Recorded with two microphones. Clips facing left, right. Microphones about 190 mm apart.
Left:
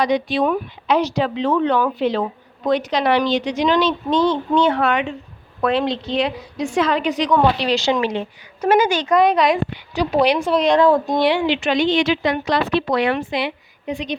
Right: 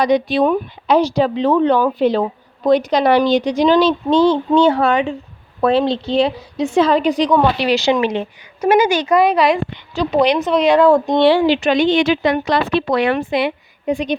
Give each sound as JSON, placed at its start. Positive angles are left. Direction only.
{"t": 0.0, "sound": "speech", "side_deg": -40}
{"t": 7.3, "sound": "speech", "side_deg": -5}
{"t": 9.7, "sound": "a woman's voice", "side_deg": 10}
{"t": 10.6, "sound": "speech", "side_deg": -5}
{"t": 11.8, "sound": "speech", "side_deg": -50}